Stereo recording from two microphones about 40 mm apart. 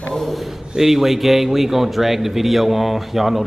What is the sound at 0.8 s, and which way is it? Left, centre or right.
Speech, centre.